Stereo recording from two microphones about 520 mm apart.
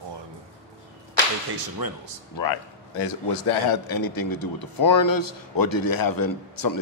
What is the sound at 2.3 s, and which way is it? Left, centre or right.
A man's voice, left.